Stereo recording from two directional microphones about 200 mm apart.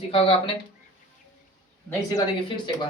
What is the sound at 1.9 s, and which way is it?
Speech, 20° left (ahead or behind).